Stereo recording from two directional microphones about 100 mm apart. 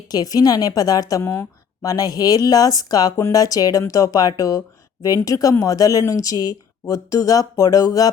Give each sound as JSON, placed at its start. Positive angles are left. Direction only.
{"t": 0.1, "sound": "speech", "side_deg": 40}
{"t": 1.2, "sound": "speech", "side_deg": 25}
{"t": 1.8, "sound": "speech", "side_deg": 35}